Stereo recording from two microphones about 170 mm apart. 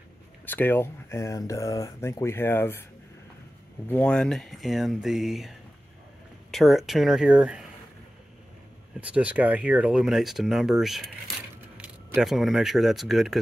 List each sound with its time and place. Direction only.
0.5 s speech: 10° left (ahead or behind)
3.8 s speech: 10° left (ahead or behind)
6.5 s speech: centre (ahead or behind)
9.0 s speech: 10° right (ahead or behind)